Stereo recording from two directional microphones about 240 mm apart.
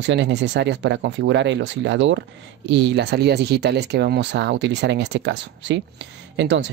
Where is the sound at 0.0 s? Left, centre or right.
Right.